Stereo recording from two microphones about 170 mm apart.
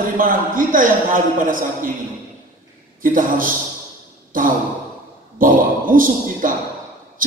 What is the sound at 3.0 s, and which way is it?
Speech, 55° right (ahead or behind).